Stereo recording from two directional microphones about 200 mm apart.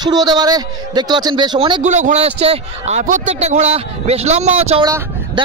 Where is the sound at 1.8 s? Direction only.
35° right (ahead or behind).